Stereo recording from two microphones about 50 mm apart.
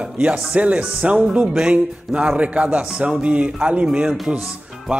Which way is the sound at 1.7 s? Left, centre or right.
Right.